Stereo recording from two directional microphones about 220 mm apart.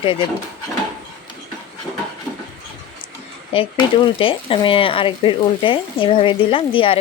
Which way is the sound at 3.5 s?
25° left (ahead or behind).